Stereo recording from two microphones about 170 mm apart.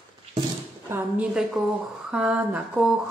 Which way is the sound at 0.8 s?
10° right (ahead or behind).